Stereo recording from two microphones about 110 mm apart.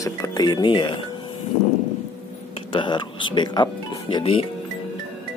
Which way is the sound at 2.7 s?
45° left (ahead or behind).